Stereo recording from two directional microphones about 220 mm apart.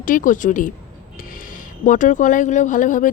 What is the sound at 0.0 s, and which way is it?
A woman's voice, 40° left (ahead or behind).